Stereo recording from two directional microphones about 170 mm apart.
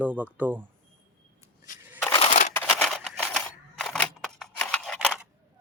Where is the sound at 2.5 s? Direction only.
5° left (ahead or behind).